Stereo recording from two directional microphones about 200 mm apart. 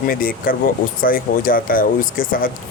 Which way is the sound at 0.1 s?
45° left (ahead or behind).